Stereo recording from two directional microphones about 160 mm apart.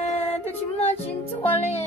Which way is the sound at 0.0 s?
40° left (ahead or behind).